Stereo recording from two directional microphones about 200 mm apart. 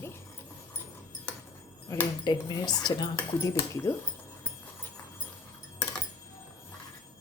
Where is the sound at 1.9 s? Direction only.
20° left (ahead or behind).